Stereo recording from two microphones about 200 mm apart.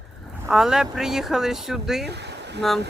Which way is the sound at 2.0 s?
55° right (ahead or behind).